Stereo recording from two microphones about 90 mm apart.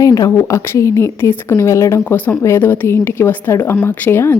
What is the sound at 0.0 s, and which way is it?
A woman's voice, 40° left (ahead or behind).